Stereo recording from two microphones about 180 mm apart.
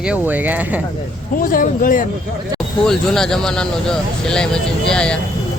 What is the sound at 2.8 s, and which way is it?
Speech, 5° left (ahead or behind).